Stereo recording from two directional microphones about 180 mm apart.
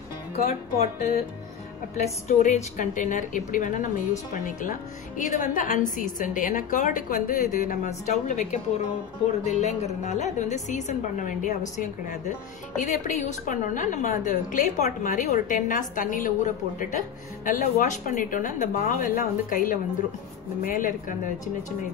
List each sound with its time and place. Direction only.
0.5 s a woman's voice: 35° left (ahead or behind)
2.2 s a woman's voice: 40° left (ahead or behind)